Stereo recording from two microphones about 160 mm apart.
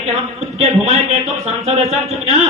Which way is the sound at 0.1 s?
40° right (ahead or behind).